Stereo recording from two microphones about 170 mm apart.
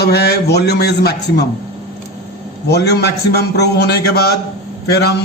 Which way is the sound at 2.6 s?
75° left (ahead or behind).